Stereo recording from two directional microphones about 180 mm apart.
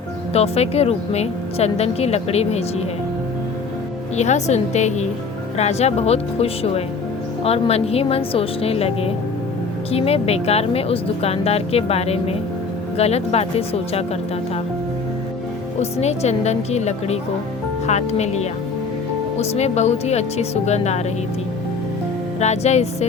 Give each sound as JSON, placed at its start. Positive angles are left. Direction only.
{"t": 0.3, "sound": "a woman's voice", "side_deg": 35}
{"t": 4.2, "sound": "a woman's voice", "side_deg": 40}
{"t": 15.8, "sound": "a woman's voice", "side_deg": 35}
{"t": 19.4, "sound": "a woman's voice", "side_deg": 35}
{"t": 22.4, "sound": "a woman's voice", "side_deg": 40}